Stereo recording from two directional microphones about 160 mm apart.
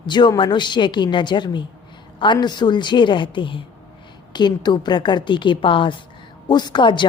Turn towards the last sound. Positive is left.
turn(degrees=30)  # may be behind; listen again after turning